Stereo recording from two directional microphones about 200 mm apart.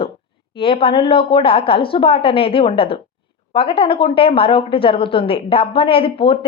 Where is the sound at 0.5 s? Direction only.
25° left (ahead or behind).